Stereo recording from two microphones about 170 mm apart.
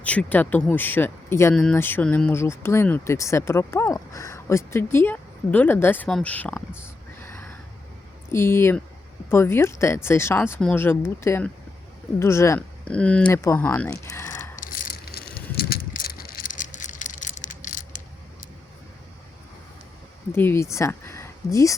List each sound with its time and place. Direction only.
0.0 s speech: 10° left (ahead or behind)
14.5 s rattle: 55° left (ahead or behind)
20.3 s speech: 15° left (ahead or behind)